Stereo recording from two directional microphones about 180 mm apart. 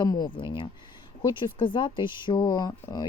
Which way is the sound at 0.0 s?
25° left (ahead or behind).